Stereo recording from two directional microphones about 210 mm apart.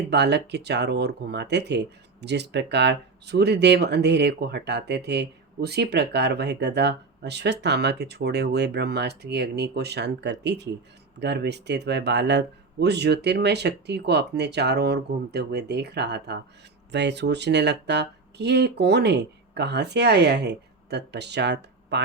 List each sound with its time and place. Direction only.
0.1 s speech: 55° right (ahead or behind)